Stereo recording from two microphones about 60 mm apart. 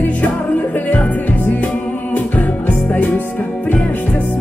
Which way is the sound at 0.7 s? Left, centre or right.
Left.